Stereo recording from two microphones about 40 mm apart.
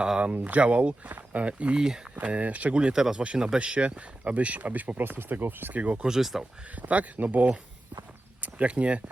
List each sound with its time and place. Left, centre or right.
0.3 s speech: right
1.7 s speech: centre
2.1 s speech: right
2.7 s speech: right
3.6 s speech: right
5.7 s speech: right
6.0 s speech: centre
6.7 s speech: right